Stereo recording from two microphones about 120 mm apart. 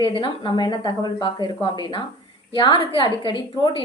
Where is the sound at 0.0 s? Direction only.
45° left (ahead or behind).